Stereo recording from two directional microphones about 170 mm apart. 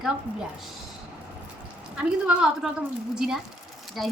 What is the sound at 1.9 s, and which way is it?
A woman's voice, 5° right (ahead or behind).